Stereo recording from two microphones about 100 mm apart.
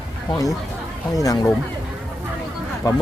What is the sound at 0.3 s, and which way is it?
Speech, 35° left (ahead or behind).